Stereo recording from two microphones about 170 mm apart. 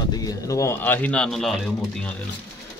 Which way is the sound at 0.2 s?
20° left (ahead or behind).